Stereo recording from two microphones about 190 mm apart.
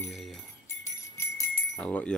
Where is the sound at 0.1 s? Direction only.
Centre (ahead or behind).